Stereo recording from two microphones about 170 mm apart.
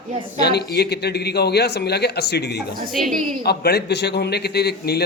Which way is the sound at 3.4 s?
70° left (ahead or behind).